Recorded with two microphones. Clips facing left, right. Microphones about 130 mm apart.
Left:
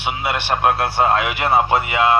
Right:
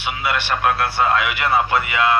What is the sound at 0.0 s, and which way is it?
Speech, 30° left (ahead or behind).